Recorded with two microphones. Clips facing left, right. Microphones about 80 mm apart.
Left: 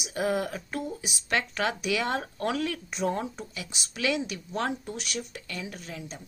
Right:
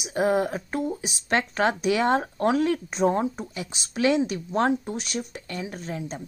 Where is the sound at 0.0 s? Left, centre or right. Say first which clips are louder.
Right 5 dB; right.